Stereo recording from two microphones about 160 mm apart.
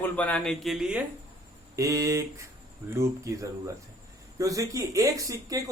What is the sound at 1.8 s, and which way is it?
Speech, 20° right (ahead or behind).